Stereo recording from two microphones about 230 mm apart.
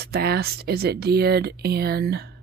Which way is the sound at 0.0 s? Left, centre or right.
Right.